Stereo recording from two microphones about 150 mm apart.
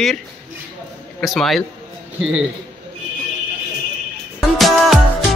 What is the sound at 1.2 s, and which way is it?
Speech, centre (ahead or behind).